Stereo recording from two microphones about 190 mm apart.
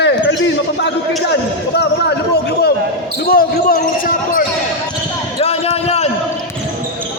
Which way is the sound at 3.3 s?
50° left (ahead or behind).